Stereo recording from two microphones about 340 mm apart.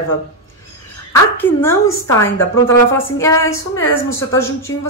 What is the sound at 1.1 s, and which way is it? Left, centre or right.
A woman's voice, centre.